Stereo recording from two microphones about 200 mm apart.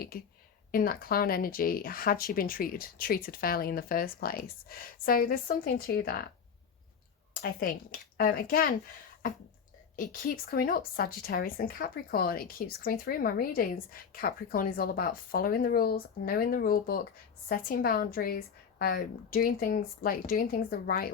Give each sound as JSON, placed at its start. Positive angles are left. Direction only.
{"t": 0.1, "sound": "speech", "side_deg": 45}
{"t": 7.4, "sound": "speech", "side_deg": 45}
{"t": 9.9, "sound": "speech", "side_deg": 45}